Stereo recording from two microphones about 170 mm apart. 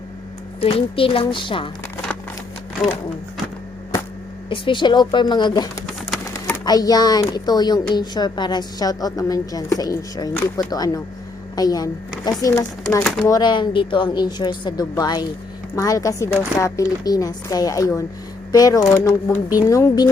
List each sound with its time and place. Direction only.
0.6 s speech: 35° left (ahead or behind)
4.4 s a woman's voice: 30° left (ahead or behind)
6.7 s a woman's voice: 20° left (ahead or behind)